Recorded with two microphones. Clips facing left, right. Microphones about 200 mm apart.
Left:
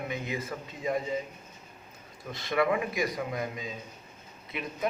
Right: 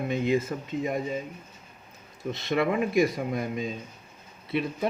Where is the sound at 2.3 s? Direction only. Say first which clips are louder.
Right 1 dB; 25° right (ahead or behind).